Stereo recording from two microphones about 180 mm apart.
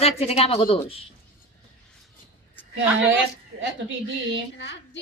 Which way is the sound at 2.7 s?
90° right.